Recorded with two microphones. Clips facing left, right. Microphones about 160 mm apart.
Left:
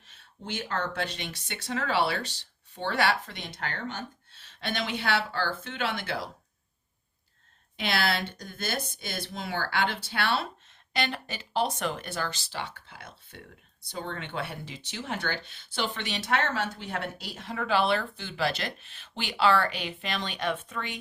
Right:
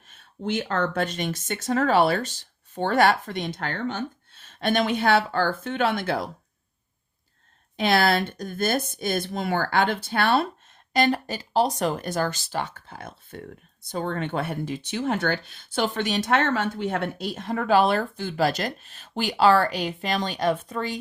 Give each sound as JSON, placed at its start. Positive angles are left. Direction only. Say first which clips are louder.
{"t": 0.7, "sound": "speech", "louder": "right 3 dB", "side_deg": -50}
{"t": 7.8, "sound": "speech", "louder": "right 8 dB", "side_deg": -50}